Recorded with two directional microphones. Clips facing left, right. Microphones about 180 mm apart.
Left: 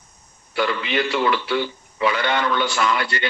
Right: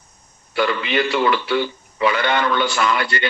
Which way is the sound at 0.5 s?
65° right (ahead or behind).